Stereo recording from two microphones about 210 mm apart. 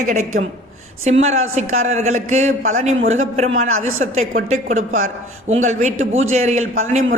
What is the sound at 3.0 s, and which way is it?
A woman's voice, 70° right (ahead or behind).